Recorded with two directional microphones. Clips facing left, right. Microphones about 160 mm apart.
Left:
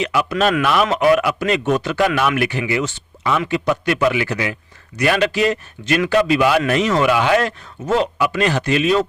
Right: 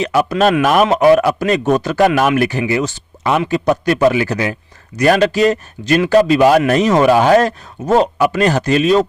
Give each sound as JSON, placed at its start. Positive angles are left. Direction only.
{"t": 0.0, "sound": "speech", "side_deg": -40}